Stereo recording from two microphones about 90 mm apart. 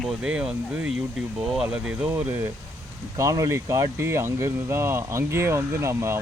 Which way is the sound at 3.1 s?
35° right (ahead or behind).